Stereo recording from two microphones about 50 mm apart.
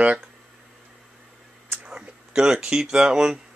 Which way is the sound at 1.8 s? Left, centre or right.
Centre.